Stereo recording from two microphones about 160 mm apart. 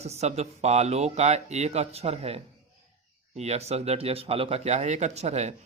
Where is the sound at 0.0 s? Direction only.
40° right (ahead or behind).